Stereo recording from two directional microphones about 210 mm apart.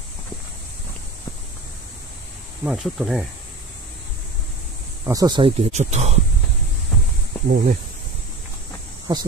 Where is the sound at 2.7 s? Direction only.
Centre (ahead or behind).